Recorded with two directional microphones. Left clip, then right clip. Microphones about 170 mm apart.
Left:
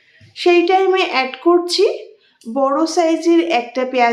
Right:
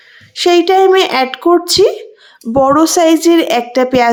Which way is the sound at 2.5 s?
55° right (ahead or behind).